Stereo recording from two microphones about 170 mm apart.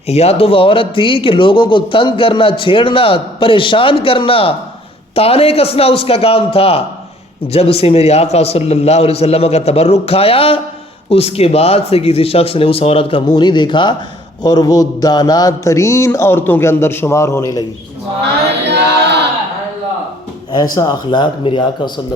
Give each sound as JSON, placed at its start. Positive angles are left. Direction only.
{"t": 0.1, "sound": "a man's voice", "side_deg": 40}
{"t": 20.7, "sound": "speech", "side_deg": 25}